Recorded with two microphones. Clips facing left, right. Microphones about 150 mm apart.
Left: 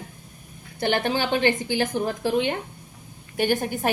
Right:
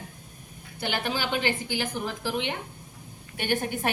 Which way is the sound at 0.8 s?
50° left (ahead or behind).